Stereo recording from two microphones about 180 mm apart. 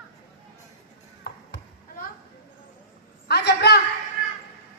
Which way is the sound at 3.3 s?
65° left (ahead or behind).